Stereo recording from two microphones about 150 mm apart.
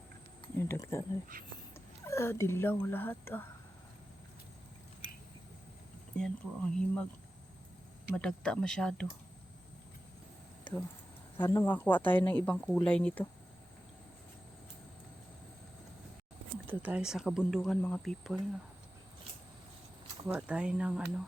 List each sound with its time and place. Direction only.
0.7 s speech: 15° left (ahead or behind)
6.1 s speech: 5° left (ahead or behind)
8.1 s speech: 5° left (ahead or behind)
10.6 s a sound: 10° left (ahead or behind)
11.3 s speech: 20° left (ahead or behind)
16.6 s speech: 10° right (ahead or behind)
20.2 s speech: 10° right (ahead or behind)